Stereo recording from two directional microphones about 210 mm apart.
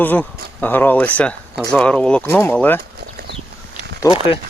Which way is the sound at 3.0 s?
45° right (ahead or behind).